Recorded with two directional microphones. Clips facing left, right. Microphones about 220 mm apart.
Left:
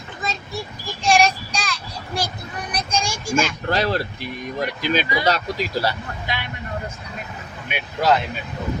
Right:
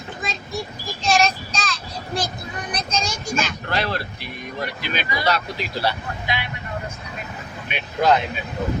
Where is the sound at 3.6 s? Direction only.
40° left (ahead or behind).